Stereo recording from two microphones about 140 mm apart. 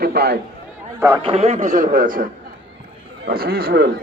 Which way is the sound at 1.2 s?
50° right (ahead or behind).